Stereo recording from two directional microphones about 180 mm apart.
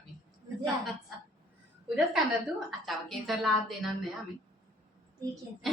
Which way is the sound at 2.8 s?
Centre (ahead or behind).